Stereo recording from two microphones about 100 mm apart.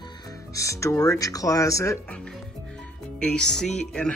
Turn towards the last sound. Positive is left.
turn(degrees=5)  # may be behind; listen again after turning